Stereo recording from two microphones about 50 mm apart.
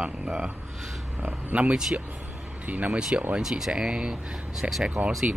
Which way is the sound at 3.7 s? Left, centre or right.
Right.